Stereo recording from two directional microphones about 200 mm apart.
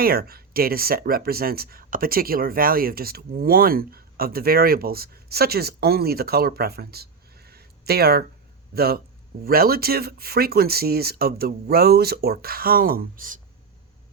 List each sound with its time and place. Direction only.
0.0 s speech: 50° right (ahead or behind)